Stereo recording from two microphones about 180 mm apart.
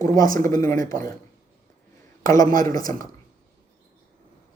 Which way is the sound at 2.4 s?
50° right (ahead or behind).